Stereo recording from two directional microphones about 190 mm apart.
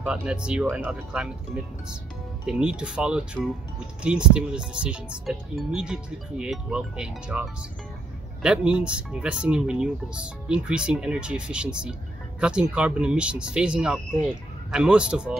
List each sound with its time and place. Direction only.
0.0 s speech: 5° right (ahead or behind)
2.4 s speech: 5° right (ahead or behind)